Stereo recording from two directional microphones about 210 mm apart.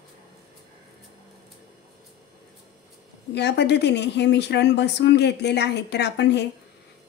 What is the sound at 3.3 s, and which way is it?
A woman's voice, 55° left (ahead or behind).